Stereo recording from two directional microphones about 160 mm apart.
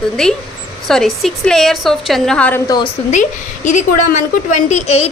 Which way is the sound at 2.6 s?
25° left (ahead or behind).